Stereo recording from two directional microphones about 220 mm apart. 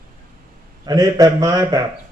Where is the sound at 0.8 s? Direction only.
15° right (ahead or behind).